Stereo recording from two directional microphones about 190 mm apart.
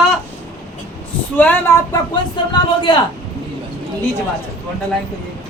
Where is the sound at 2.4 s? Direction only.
25° left (ahead or behind).